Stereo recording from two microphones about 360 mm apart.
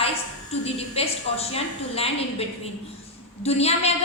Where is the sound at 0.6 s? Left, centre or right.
Centre.